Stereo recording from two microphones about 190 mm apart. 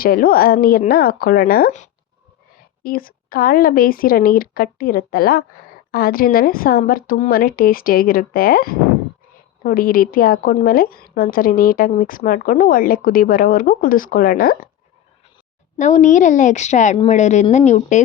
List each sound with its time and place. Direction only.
0.0 s a woman's voice: 50° left (ahead or behind)
15.8 s a woman's voice: 40° left (ahead or behind)